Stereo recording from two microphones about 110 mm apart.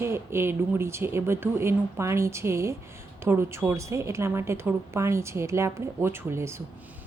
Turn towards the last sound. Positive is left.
turn(degrees=-25)  # may be behind; listen again after turning